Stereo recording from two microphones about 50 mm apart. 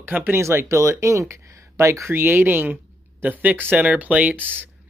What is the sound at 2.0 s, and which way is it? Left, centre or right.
Speech, right.